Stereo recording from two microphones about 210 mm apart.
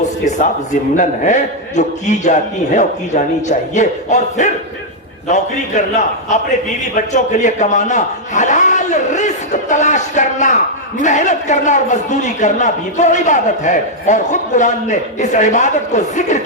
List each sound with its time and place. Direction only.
0.3 s a man's voice: 35° left (ahead or behind)
6.9 s a man's voice: 35° left (ahead or behind)